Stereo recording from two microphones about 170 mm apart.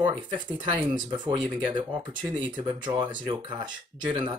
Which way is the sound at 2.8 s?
25° right (ahead or behind).